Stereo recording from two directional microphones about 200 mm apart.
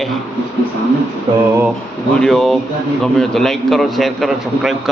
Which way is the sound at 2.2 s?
Centre (ahead or behind).